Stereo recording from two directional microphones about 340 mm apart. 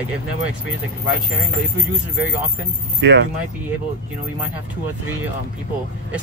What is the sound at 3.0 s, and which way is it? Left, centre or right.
Speech, right.